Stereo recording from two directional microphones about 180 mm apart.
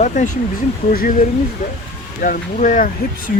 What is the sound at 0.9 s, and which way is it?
Speech, 55° left (ahead or behind).